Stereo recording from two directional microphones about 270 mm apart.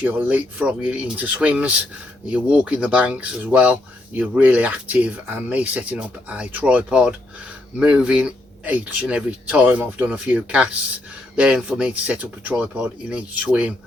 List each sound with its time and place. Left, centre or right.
0.0 s speech: centre